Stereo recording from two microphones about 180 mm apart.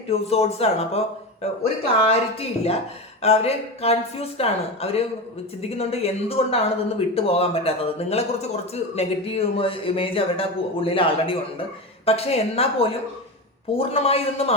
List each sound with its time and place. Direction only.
0.1 s speech: 35° left (ahead or behind)